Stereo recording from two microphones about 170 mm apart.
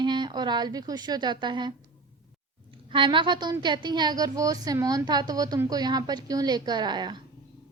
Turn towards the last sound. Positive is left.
turn(degrees=-25)  # may be behind; listen again after turning